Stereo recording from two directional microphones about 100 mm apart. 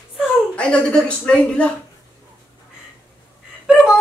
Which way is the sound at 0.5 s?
10° left (ahead or behind).